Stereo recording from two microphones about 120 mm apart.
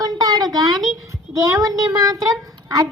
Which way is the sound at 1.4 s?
30° right (ahead or behind).